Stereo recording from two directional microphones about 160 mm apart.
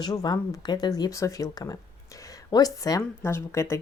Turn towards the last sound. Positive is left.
turn(degrees=15)  # may be behind; listen again after turning